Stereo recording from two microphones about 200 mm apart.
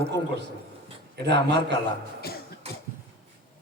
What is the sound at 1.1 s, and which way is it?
Speech, 55° right (ahead or behind).